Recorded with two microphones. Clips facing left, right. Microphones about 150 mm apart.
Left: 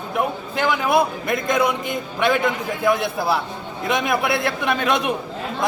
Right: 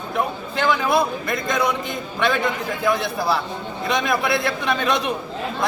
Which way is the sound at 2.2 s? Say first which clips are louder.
Left 2 dB; 10° left (ahead or behind).